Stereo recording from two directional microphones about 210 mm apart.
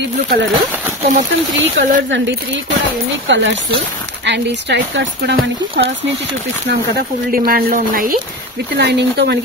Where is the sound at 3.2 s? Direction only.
60° right (ahead or behind); by 8.1 s 40° right (ahead or behind).